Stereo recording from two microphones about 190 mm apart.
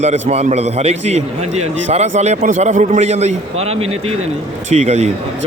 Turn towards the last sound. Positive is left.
turn(degrees=-40)  # may be behind; listen again after turning